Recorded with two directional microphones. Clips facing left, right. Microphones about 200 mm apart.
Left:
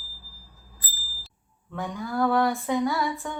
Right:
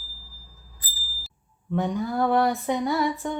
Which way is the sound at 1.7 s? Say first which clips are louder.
Right 5 dB; 20° right (ahead or behind).